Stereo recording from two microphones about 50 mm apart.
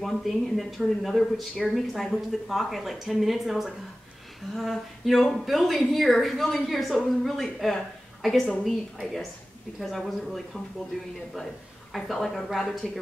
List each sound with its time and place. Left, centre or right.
0.0 s a woman's voice: centre
11.9 s a woman's voice: centre